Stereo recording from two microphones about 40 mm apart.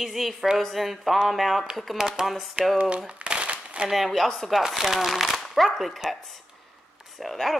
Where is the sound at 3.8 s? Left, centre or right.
Centre.